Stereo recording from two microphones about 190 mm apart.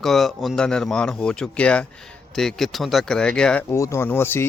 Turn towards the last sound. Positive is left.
turn(degrees=10)  # may be behind; listen again after turning